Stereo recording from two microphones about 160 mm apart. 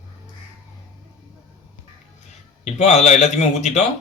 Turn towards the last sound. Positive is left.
turn(degrees=45)  # may be behind; listen again after turning